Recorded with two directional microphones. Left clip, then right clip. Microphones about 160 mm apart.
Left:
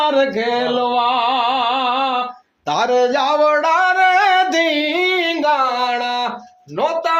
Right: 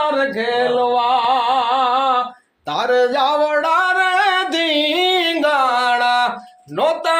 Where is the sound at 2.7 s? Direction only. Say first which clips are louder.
Left 1 dB; 40° left (ahead or behind).